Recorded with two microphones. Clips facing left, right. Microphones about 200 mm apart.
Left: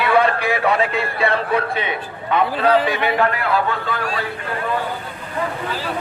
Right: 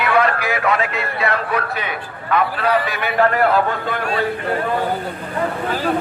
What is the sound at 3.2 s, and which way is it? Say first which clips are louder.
Speech: right 4 dB; 45° right (ahead or behind).